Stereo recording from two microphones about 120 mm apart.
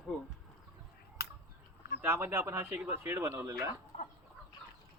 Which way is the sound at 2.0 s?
15° right (ahead or behind).